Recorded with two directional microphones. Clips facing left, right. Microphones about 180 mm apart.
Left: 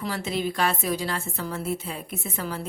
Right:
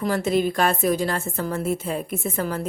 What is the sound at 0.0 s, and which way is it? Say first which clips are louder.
Speech: right 7 dB; 50° right (ahead or behind).